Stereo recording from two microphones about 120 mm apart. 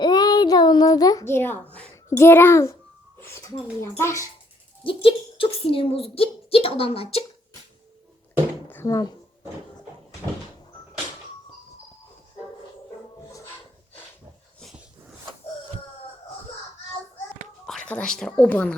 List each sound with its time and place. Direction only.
0.0 s child singing: 35° left (ahead or behind)
2.0 s a child's voice: 20° left (ahead or behind)
4.9 s a woman's voice: 50° left (ahead or behind)
8.7 s speech: 25° left (ahead or behind)
17.7 s speech: 10° left (ahead or behind)